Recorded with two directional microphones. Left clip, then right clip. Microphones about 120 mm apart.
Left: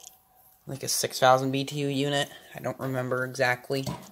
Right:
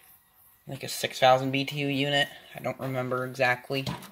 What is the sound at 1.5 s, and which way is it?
Speech, 20° left (ahead or behind).